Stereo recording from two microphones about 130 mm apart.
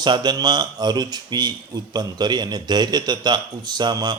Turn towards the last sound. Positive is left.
turn(degrees=-30)  # may be behind; listen again after turning